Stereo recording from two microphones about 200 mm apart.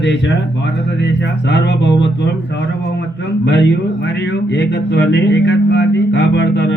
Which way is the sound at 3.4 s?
60° left (ahead or behind).